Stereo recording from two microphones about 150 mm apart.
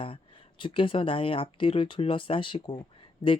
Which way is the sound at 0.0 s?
35° left (ahead or behind).